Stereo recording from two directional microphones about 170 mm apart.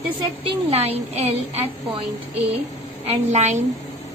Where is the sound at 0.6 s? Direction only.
40° right (ahead or behind).